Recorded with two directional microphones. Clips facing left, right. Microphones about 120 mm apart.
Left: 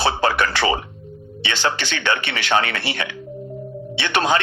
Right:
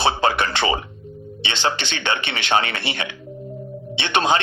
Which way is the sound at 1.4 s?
20° right (ahead or behind).